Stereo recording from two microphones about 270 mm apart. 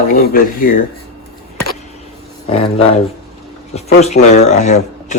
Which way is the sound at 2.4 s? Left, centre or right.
Left.